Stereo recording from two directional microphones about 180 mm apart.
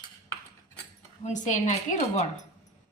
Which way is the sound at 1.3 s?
40° left (ahead or behind).